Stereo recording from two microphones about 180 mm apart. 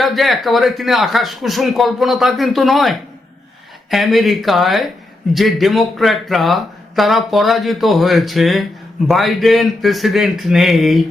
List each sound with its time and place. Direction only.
0.0 s speech: centre (ahead or behind)